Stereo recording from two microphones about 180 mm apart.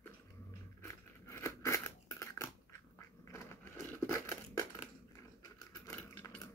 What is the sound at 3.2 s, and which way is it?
Crushing, 15° left (ahead or behind).